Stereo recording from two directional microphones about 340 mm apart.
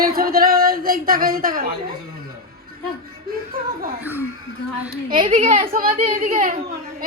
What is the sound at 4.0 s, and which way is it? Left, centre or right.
Speech, centre.